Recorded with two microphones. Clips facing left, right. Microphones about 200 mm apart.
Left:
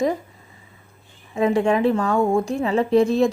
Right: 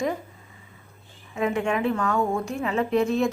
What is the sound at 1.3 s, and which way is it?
Speech, 35° left (ahead or behind).